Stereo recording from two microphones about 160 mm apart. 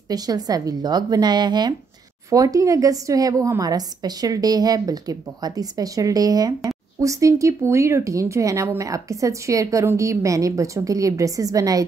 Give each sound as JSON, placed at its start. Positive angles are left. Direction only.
{"t": 0.1, "sound": "speech", "side_deg": -25}